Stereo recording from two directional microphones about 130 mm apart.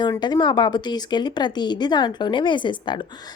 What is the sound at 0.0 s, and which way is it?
A woman's voice, 35° left (ahead or behind).